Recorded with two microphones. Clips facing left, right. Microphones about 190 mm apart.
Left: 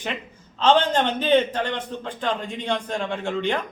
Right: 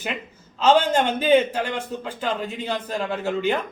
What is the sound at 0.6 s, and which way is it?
A man's voice, 10° right (ahead or behind).